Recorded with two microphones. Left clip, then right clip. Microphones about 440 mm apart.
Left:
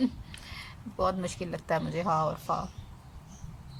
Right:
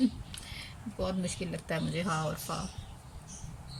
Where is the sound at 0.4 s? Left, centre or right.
Centre.